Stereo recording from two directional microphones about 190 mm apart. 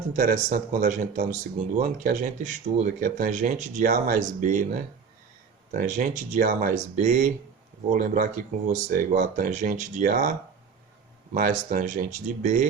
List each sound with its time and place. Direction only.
0.1 s speech: 45° right (ahead or behind)
11.3 s speech: 45° right (ahead or behind)